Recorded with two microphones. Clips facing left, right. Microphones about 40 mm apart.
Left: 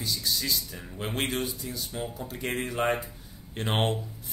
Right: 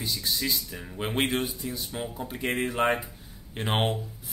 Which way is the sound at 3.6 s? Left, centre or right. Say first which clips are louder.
Right 1 dB; centre.